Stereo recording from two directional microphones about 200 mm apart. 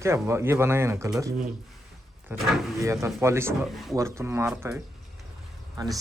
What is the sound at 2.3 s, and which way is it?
Speech, 10° right (ahead or behind).